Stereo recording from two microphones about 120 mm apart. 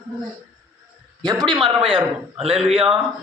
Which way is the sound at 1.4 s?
40° right (ahead or behind).